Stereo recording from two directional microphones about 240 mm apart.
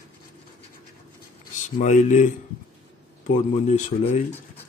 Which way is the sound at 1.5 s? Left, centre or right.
Left.